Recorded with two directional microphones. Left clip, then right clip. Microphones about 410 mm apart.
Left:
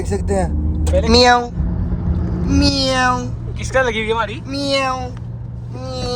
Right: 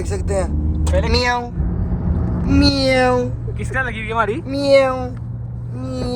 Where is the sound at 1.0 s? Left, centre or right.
Left.